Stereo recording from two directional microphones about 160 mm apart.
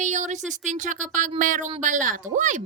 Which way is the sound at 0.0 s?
50° right (ahead or behind).